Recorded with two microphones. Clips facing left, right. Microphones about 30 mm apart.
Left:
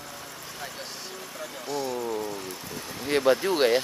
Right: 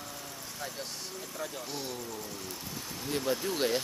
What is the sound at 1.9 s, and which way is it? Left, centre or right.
Speech, left.